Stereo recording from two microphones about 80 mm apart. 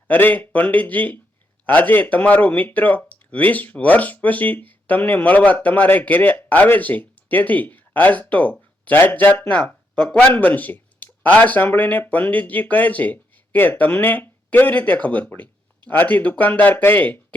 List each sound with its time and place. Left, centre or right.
0.1 s speech: left
9.9 s speech: centre